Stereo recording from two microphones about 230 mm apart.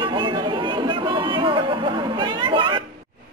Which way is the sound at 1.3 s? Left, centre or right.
Right.